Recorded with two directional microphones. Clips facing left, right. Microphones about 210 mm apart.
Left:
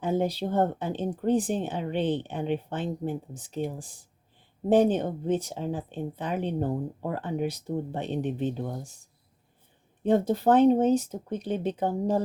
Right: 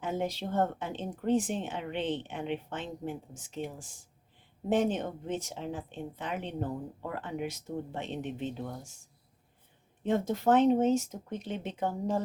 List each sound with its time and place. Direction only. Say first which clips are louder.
0.0 s speech: left 6 dB; 35° left (ahead or behind)
10.0 s speech: left 6 dB; 35° left (ahead or behind)